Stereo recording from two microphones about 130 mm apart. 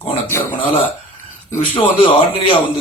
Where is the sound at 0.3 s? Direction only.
15° left (ahead or behind).